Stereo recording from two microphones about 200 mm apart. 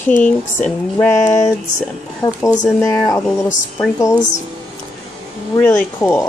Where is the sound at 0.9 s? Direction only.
10° left (ahead or behind).